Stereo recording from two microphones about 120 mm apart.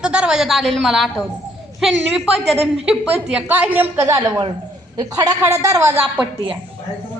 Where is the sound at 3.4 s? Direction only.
10° right (ahead or behind).